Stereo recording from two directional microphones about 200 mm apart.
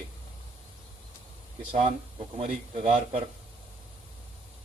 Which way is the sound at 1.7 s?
30° right (ahead or behind).